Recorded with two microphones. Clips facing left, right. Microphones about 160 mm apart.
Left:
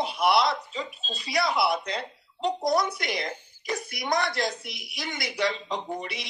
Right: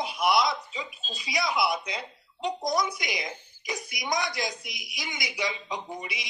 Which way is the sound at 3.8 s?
60° left (ahead or behind).